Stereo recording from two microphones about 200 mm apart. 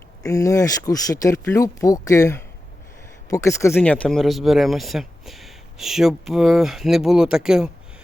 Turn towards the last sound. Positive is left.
turn(degrees=-5)  # may be behind; listen again after turning